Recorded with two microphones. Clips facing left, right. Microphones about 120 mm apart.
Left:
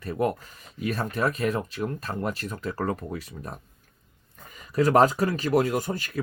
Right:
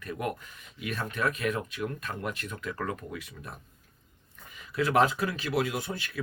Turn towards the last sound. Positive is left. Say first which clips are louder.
# left 6 dB
turn(degrees=40)  # may be behind; listen again after turning